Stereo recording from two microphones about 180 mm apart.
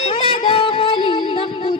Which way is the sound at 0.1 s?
25° left (ahead or behind).